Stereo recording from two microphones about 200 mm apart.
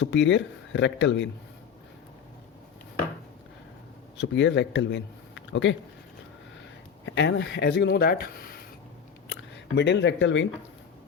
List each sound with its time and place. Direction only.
0.0 s speech: 65° left (ahead or behind)
4.2 s speech: 65° left (ahead or behind)
7.0 s speech: 60° left (ahead or behind)
9.3 s speech: 60° left (ahead or behind)